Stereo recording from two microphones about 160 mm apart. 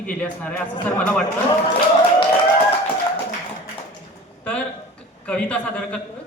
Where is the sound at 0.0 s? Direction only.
10° left (ahead or behind).